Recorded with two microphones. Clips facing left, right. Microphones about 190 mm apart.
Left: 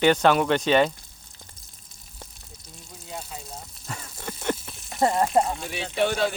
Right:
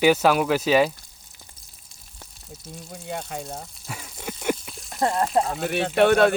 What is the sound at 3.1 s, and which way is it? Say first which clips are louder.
Speech: right 6 dB; 70° right (ahead or behind).